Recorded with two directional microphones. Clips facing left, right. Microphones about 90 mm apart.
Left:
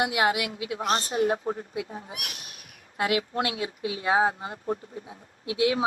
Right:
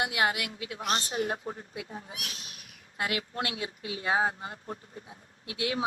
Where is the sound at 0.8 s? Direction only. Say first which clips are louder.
Left 5 dB; 35° left (ahead or behind).